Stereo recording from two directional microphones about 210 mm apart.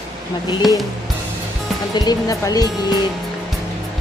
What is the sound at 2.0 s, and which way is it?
Speech, 20° left (ahead or behind).